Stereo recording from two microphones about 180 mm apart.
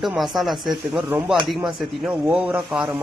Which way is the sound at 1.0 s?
10° right (ahead or behind).